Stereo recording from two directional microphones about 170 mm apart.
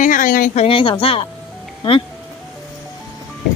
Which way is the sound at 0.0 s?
50° left (ahead or behind).